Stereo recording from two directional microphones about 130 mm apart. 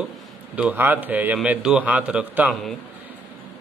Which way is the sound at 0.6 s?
15° right (ahead or behind).